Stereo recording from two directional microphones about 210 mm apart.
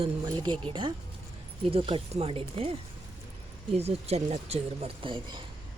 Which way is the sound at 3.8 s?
30° right (ahead or behind).